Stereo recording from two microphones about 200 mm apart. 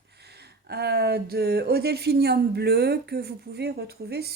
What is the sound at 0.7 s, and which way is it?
Speech, 55° right (ahead or behind).